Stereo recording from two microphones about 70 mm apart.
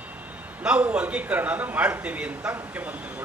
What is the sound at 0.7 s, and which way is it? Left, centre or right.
Speech, centre.